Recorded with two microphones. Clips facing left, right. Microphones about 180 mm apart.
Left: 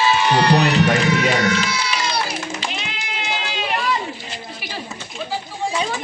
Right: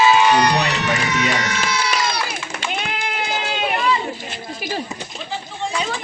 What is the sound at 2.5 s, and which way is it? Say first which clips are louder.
Sheep: right 2 dB; 55° right (ahead or behind).